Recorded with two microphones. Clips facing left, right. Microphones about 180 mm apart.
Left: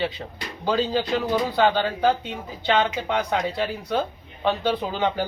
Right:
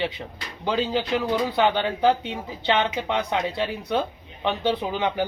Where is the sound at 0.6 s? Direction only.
20° right (ahead or behind).